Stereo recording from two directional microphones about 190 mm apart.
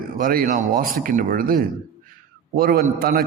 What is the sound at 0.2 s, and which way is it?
Speech, 50° right (ahead or behind).